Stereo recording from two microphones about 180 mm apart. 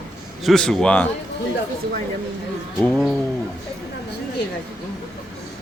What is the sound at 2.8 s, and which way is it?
Speech, 5° left (ahead or behind).